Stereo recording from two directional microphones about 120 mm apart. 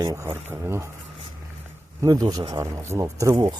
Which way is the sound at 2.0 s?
30° right (ahead or behind).